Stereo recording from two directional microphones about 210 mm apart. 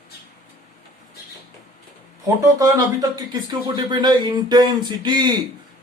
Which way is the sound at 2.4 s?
15° right (ahead or behind).